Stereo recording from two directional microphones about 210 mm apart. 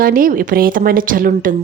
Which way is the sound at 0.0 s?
40° right (ahead or behind).